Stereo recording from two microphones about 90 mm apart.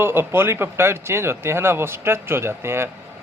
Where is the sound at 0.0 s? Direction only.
25° right (ahead or behind).